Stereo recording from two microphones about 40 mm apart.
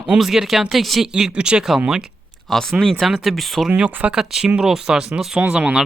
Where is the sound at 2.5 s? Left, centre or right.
Centre.